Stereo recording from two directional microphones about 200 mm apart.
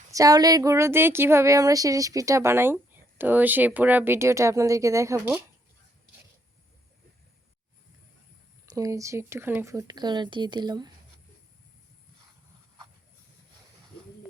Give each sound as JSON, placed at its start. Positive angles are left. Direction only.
{"t": 0.1, "sound": "speech", "side_deg": -15}
{"t": 8.7, "sound": "speech", "side_deg": -15}